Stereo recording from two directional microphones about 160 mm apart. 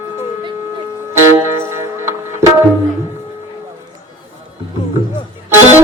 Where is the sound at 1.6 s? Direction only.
15° right (ahead or behind).